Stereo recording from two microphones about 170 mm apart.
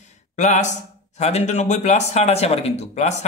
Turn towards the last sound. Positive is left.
turn(degrees=40)  # may be behind; listen again after turning